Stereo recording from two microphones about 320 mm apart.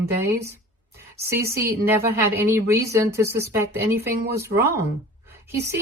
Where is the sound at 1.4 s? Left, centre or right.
Centre.